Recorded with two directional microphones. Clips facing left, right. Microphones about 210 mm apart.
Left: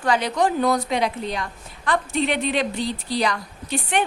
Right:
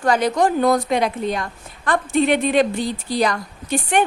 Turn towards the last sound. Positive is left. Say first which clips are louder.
# right 4 dB
turn(degrees=-50)  # may be behind; listen again after turning